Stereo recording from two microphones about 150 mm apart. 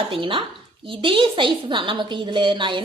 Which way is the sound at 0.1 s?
35° right (ahead or behind).